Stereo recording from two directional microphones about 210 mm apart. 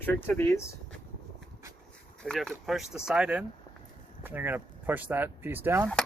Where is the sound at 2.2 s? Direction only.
5° left (ahead or behind).